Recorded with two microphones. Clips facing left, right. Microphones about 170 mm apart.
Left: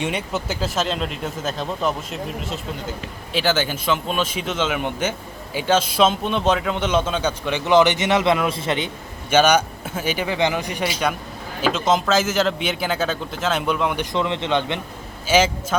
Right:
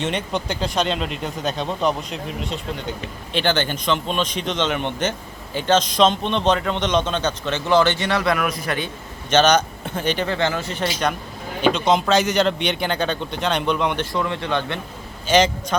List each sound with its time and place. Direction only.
0.0 s a man's voice: 10° left (ahead or behind)
9.3 s a man's voice: 10° left (ahead or behind)
14.0 s speech: 20° left (ahead or behind)
15.3 s a man's voice: 5° left (ahead or behind)